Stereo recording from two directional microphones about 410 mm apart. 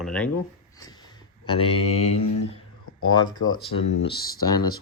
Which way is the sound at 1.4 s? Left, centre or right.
Centre.